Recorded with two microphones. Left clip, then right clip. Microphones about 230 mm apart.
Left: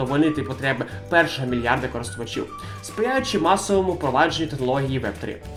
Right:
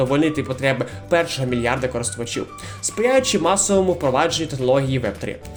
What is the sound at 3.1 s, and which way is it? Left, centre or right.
Speech, right.